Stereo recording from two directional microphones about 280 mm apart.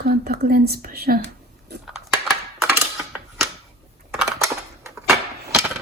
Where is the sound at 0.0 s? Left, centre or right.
Right.